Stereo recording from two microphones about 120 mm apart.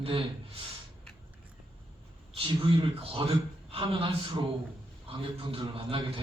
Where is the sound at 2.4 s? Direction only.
50° right (ahead or behind).